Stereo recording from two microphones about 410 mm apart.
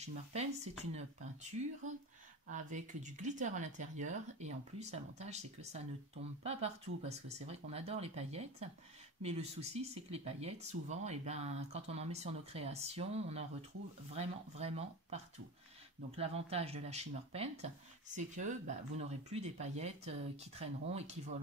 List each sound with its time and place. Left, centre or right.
0.0 s speech: centre
2.5 s speech: centre
16.2 s speech: centre